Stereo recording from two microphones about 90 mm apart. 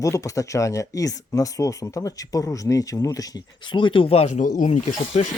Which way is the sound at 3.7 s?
65° left (ahead or behind).